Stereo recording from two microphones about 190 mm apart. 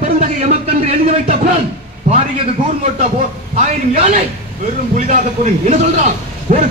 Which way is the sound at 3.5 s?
40° right (ahead or behind).